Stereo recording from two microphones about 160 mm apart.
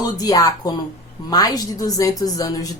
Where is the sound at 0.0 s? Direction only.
25° left (ahead or behind).